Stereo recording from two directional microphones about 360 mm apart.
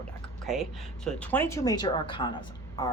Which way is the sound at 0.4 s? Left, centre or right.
Centre.